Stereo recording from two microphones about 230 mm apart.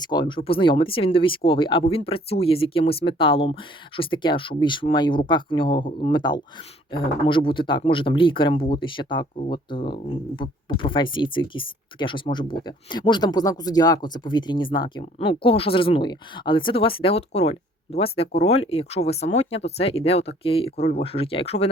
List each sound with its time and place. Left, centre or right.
0.0 s speech: centre